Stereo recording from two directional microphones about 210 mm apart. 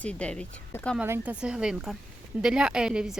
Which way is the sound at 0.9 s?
10° right (ahead or behind).